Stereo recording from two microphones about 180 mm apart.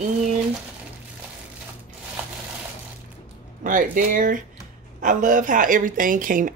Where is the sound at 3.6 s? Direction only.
45° right (ahead or behind).